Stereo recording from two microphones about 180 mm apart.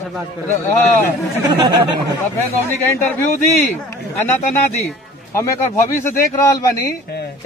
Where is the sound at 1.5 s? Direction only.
25° right (ahead or behind).